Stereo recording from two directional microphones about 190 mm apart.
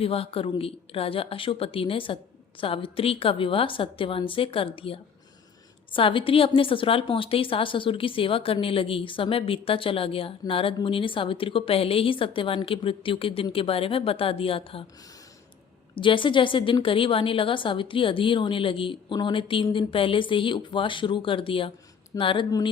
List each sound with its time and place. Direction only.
0.0 s a woman's voice: 30° left (ahead or behind)
16.0 s a woman's voice: 25° left (ahead or behind)